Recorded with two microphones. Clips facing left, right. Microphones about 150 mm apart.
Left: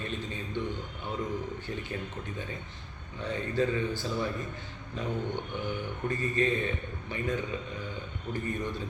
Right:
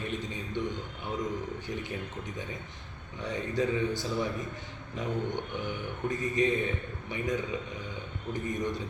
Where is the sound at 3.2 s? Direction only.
15° right (ahead or behind).